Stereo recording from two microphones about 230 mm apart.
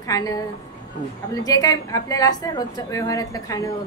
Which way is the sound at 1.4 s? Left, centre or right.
Centre.